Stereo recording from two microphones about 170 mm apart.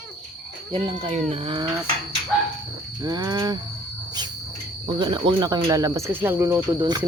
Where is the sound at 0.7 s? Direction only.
35° right (ahead or behind).